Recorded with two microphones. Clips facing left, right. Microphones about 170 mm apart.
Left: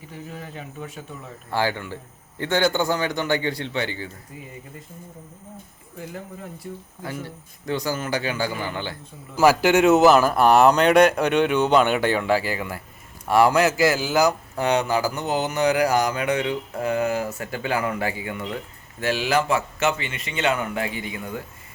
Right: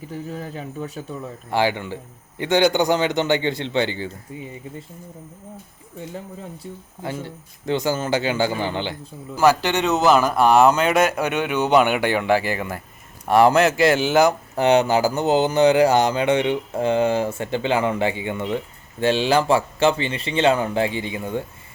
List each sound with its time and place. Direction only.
0.3 s speech: 40° right (ahead or behind)
1.5 s speech: 20° right (ahead or behind)
6.6 s speech: 25° right (ahead or behind)
9.4 s a man's voice: 10° left (ahead or behind); by 21.4 s 30° right (ahead or behind)